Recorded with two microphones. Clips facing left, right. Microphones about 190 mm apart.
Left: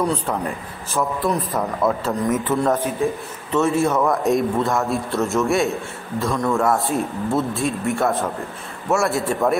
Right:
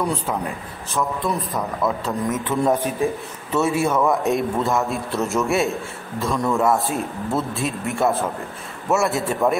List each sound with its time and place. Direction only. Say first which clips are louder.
0.9 s a man's voice: left 2 dB; centre (ahead or behind)
2.6 s a man's voice: even; 15° right (ahead or behind); by 9.6 s centre (ahead or behind)